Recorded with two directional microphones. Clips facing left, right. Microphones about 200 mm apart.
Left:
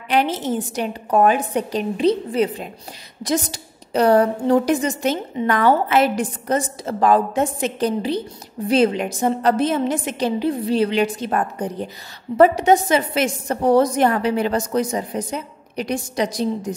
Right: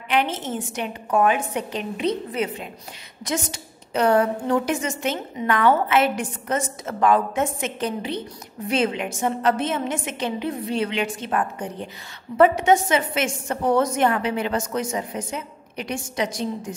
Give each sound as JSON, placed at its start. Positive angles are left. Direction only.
{"t": 0.1, "sound": "a woman's voice", "side_deg": 35}